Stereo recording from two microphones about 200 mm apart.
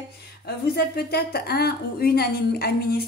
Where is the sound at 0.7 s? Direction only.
50° left (ahead or behind).